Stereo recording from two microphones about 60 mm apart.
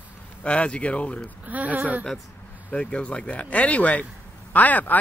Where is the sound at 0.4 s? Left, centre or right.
Left.